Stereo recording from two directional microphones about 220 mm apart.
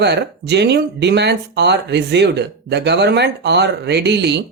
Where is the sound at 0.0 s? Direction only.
50° right (ahead or behind).